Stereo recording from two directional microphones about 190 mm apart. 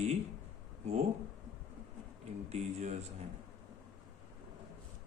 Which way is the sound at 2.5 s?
35° right (ahead or behind).